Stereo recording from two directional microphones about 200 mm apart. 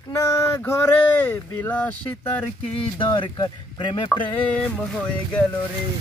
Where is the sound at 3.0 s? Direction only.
25° left (ahead or behind).